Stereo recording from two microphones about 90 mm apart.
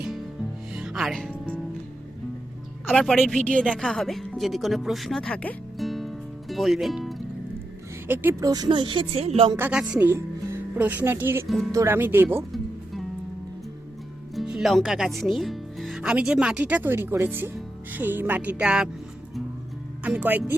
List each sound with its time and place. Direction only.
0.7 s music: 5° right (ahead or behind)
3.0 s speech: 5° left (ahead or behind)
5.7 s music: centre (ahead or behind)
8.0 s speech: 25° right (ahead or behind)
8.4 s speech: 45° right (ahead or behind)
8.7 s speech: 70° right (ahead or behind); by 9.5 s 85° right
10.0 s speech: 25° right (ahead or behind)
14.3 s music: 5° right (ahead or behind)
14.7 s speech: centre (ahead or behind)
20.1 s speech: 20° right (ahead or behind)